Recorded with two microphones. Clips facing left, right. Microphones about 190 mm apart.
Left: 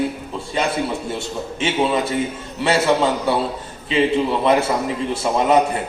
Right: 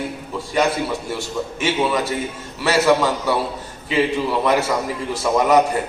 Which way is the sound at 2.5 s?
25° left (ahead or behind).